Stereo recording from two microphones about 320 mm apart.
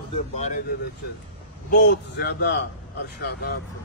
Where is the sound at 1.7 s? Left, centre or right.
Left.